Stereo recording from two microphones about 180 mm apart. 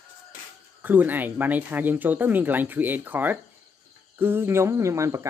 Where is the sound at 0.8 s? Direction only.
10° right (ahead or behind).